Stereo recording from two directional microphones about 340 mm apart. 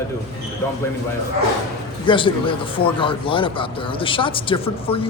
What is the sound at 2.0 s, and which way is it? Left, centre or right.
A man's voice, centre.